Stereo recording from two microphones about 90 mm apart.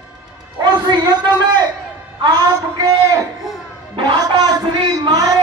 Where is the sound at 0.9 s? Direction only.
50° right (ahead or behind).